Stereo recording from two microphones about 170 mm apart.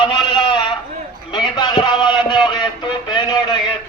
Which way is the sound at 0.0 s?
25° left (ahead or behind).